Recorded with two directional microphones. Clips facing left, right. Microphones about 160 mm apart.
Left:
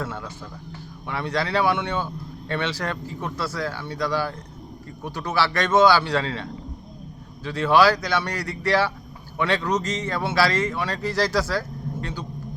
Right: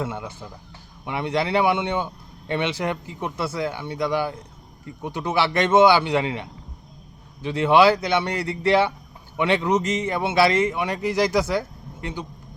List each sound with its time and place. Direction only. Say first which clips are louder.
0.0 s a man's voice: right 2 dB; 20° right (ahead or behind)